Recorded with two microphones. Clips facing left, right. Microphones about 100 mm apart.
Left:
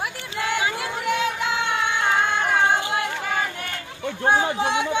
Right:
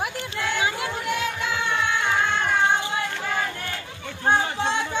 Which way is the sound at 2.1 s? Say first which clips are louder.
Left 2 dB; 10° left (ahead or behind).